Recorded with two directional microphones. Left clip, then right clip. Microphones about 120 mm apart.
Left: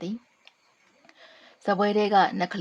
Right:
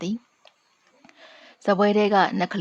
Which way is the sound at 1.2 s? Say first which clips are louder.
Right 4 dB; 25° right (ahead or behind).